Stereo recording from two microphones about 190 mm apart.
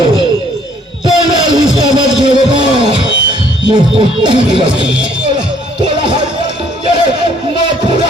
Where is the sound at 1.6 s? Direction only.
85° left.